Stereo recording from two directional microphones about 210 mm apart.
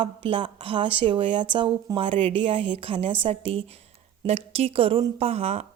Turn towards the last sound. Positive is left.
turn(degrees=-30)  # may be behind; listen again after turning